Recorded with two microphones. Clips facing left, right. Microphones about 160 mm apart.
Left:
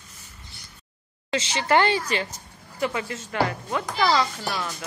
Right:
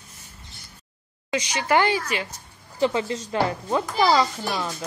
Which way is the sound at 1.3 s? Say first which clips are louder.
Even; 15° right (ahead or behind).